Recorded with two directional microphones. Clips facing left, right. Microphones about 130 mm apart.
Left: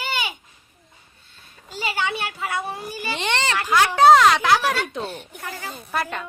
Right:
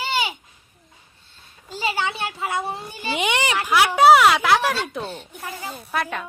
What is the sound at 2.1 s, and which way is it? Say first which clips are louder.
Speech: right 1 dB; 25° right (ahead or behind).